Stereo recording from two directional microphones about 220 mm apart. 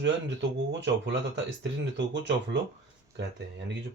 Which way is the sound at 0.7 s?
55° right (ahead or behind).